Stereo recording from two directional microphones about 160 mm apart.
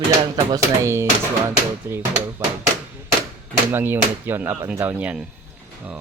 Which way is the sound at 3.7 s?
15° right (ahead or behind).